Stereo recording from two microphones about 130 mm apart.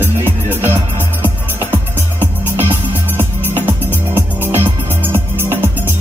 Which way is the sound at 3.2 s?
15° right (ahead or behind).